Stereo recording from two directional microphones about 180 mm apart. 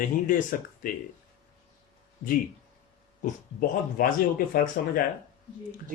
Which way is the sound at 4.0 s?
50° left (ahead or behind).